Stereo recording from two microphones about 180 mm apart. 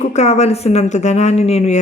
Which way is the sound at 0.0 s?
40° left (ahead or behind).